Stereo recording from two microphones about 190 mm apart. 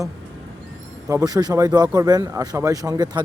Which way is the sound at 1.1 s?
20° right (ahead or behind).